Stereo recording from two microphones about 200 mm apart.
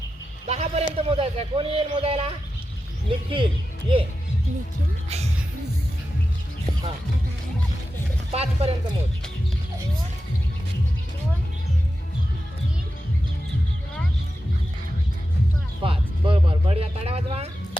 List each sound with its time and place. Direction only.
0.4 s a sound: 30° right (ahead or behind)
0.9 s speech: 30° right (ahead or behind)
5.0 s speech: 30° right (ahead or behind)
8.3 s speech: 30° right (ahead or behind)
15.8 s speech: 25° right (ahead or behind)